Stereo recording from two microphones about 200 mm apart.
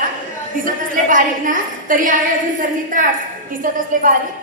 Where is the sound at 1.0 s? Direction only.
40° right (ahead or behind).